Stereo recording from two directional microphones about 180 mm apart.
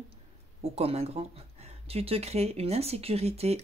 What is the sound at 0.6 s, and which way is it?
Speech, 35° right (ahead or behind).